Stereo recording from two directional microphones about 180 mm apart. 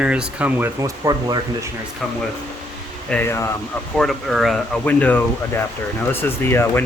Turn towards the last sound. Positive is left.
turn(degrees=10)  # may be behind; listen again after turning